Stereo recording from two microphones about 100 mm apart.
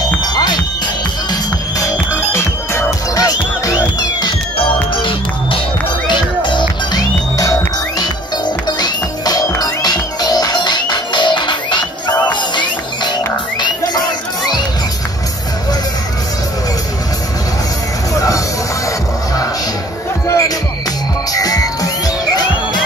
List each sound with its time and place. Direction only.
0.2 s music: 40° left (ahead or behind)
6.0 s music: 50° left (ahead or behind)
8.6 s music: 45° left (ahead or behind)
18.1 s music: 35° left (ahead or behind)
20.2 s music: 35° left (ahead or behind)